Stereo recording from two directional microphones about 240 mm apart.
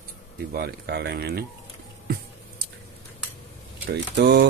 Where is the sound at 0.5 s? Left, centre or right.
Right.